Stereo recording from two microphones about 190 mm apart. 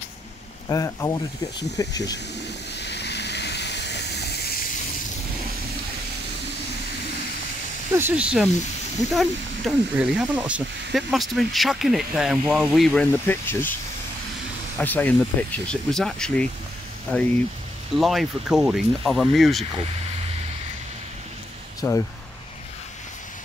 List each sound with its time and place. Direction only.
0.7 s speech: 15° left (ahead or behind)
2.7 s a sound: 60° left (ahead or behind)
7.9 s speech: 10° right (ahead or behind); by 13.7 s 10° left (ahead or behind)
14.8 s speech: 10° left (ahead or behind)
21.8 s speech: 15° left (ahead or behind)